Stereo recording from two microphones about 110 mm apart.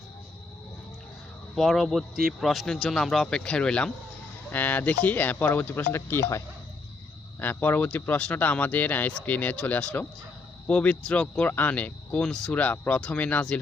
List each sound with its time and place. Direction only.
1.5 s speech: centre (ahead or behind); by 6.4 s 25° left (ahead or behind)
7.4 s speech: 15° left (ahead or behind)